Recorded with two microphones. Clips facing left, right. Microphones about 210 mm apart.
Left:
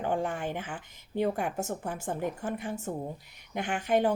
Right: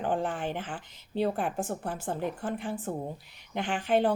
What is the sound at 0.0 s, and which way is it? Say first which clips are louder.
A woman's voice: even; 10° left (ahead or behind).